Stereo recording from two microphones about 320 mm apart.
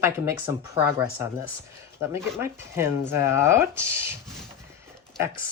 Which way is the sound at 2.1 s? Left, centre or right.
Centre.